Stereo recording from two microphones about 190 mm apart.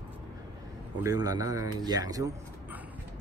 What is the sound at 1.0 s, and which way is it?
Speech, 20° right (ahead or behind).